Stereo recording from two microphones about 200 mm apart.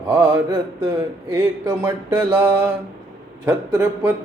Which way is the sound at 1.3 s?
15° right (ahead or behind).